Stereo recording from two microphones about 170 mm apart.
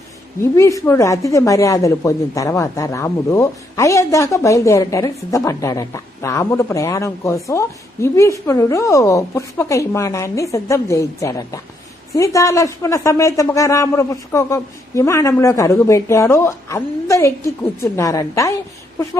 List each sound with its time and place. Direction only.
0.5 s a woman's voice: 15° left (ahead or behind)